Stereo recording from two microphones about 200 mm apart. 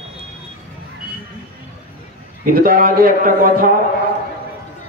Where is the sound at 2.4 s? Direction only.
45° right (ahead or behind).